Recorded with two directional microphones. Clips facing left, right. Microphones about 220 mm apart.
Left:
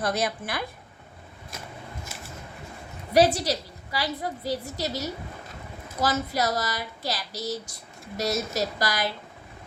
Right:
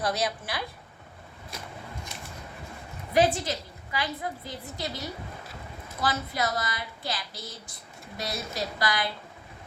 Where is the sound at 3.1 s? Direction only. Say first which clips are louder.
Left 3 dB; 40° left (ahead or behind).